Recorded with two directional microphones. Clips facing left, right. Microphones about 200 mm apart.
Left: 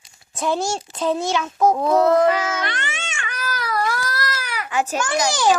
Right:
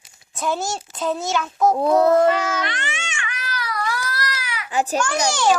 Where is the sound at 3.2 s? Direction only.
40° left (ahead or behind).